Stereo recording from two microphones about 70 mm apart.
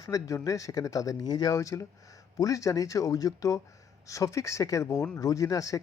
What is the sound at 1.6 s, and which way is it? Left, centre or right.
Speech, left.